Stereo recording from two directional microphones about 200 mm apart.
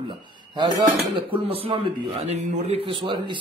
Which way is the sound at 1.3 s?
25° right (ahead or behind).